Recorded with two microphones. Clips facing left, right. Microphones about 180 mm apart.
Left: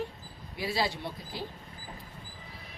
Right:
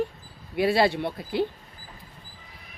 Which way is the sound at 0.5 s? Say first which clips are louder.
Right 10 dB; 65° right (ahead or behind).